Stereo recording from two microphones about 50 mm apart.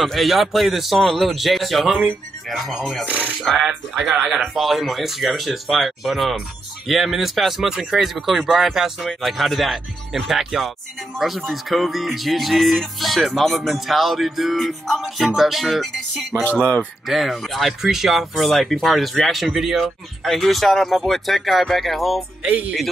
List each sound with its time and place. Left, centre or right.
0.0 s music: centre
3.1 s speech: right
3.6 s music: centre
22.5 s speech: right